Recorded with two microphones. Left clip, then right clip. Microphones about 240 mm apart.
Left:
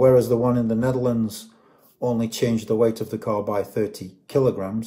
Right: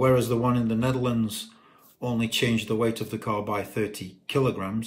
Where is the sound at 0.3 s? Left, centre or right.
Right.